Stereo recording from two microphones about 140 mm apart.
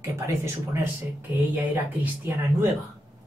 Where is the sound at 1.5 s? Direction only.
15° right (ahead or behind).